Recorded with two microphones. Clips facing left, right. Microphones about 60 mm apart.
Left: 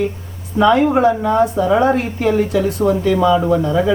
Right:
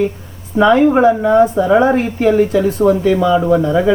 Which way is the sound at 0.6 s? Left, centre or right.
Right.